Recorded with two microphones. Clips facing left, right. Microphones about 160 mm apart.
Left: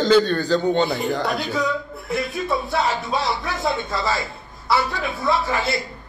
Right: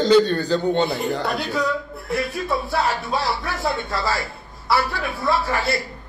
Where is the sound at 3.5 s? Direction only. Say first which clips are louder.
Left 1 dB; 20° left (ahead or behind).